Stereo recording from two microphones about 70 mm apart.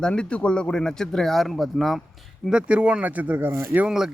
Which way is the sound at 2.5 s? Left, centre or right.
Centre.